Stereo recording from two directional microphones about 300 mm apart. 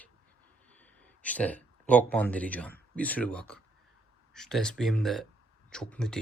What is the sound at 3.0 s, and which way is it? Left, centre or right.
Speech, centre.